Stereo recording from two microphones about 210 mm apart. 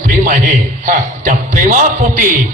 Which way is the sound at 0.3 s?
35° right (ahead or behind).